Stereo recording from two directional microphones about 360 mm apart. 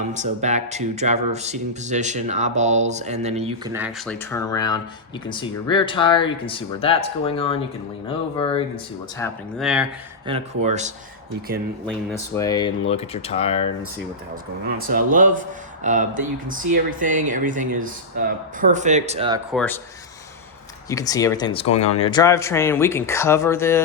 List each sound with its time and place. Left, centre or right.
0.1 s speech: centre
3.7 s speech: centre
9.1 s speech: centre
10.3 s speech: centre
11.9 s speech: centre
14.7 s speech: right
19.5 s speech: centre
20.9 s speech: centre